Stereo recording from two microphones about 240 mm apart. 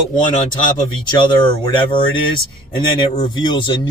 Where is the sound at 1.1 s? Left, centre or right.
Centre.